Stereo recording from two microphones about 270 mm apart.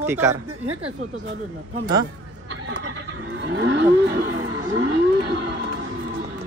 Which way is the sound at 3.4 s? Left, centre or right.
Right.